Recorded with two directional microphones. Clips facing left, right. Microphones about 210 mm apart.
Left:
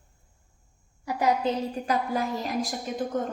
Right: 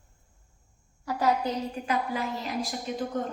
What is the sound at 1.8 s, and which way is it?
Speech, 35° left (ahead or behind).